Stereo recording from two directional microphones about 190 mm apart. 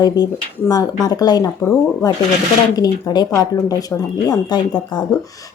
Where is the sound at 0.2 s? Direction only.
20° left (ahead or behind).